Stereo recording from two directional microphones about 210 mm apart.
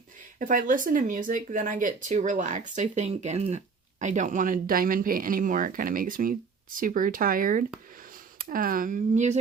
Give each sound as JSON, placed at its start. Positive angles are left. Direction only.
{"t": 0.3, "sound": "speech", "side_deg": -40}